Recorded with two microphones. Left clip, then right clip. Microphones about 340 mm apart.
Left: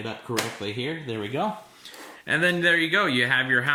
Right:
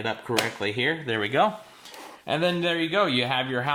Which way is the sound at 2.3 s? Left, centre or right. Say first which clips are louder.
Left 3 dB; centre.